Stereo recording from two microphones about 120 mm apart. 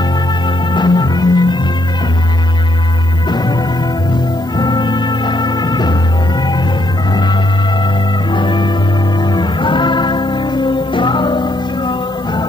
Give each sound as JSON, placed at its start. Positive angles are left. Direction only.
{"t": 0.7, "sound": "music", "side_deg": 35}
{"t": 3.3, "sound": "music", "side_deg": 35}
{"t": 4.6, "sound": "music", "side_deg": 40}
{"t": 8.3, "sound": "music", "side_deg": 40}